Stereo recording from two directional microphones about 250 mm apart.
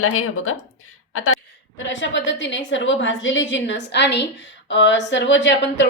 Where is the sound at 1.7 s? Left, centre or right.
Left.